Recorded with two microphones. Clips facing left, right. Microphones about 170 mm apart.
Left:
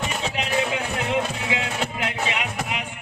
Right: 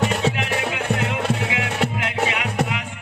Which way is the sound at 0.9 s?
70° right (ahead or behind).